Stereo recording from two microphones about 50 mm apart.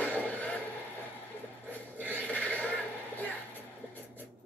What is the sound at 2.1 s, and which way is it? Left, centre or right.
Neigh, left.